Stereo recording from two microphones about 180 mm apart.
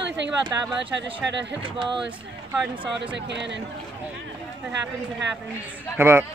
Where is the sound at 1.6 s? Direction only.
30° right (ahead or behind).